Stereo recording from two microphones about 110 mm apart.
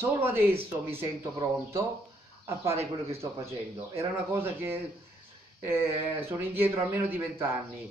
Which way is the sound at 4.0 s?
20° right (ahead or behind).